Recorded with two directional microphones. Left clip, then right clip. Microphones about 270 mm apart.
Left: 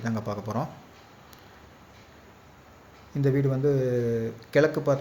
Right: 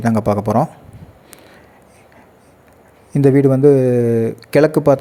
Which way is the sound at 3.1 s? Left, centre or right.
Right.